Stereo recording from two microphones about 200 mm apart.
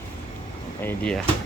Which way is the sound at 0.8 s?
10° left (ahead or behind).